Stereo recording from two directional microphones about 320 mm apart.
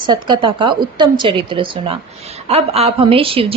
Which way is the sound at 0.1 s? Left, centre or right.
Centre.